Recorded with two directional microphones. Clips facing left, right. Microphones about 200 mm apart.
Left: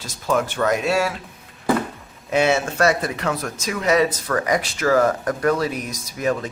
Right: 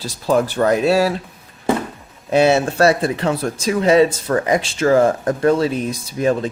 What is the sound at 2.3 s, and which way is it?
Speech, 35° right (ahead or behind).